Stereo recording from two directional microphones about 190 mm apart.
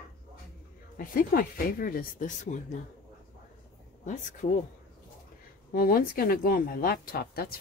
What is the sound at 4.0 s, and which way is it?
Speech, 40° left (ahead or behind).